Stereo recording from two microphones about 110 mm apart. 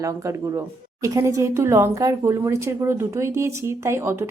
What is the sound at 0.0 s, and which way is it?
Speech, 30° right (ahead or behind).